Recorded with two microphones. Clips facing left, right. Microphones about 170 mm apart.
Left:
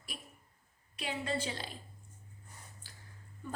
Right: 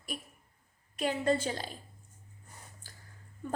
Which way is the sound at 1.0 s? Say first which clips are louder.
Right 7 dB; 45° right (ahead or behind).